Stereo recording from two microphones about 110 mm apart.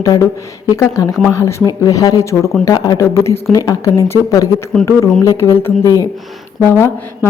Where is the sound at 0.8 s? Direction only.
30° left (ahead or behind).